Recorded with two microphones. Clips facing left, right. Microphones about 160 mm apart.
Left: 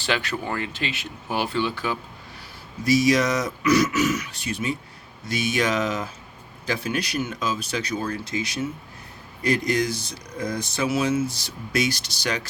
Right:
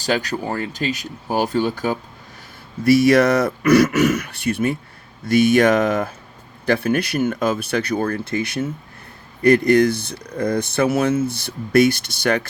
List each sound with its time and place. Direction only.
0.0 s speech: 40° right (ahead or behind)
2.8 s speech: 60° right (ahead or behind)